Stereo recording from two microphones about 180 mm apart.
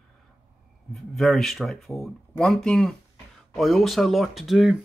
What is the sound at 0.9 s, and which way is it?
Speech, centre (ahead or behind).